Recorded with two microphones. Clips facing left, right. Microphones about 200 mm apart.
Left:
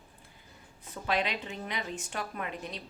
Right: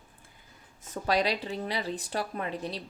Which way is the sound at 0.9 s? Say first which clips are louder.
Right 4 dB; 40° right (ahead or behind).